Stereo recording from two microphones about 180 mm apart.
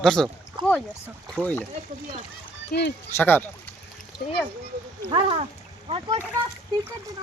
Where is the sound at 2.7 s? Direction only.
70° left (ahead or behind).